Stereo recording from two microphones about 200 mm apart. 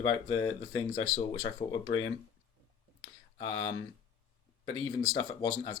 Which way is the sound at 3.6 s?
75° left (ahead or behind).